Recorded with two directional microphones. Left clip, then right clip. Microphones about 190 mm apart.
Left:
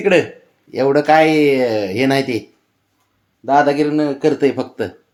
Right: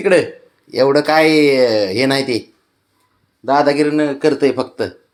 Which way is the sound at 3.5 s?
5° left (ahead or behind).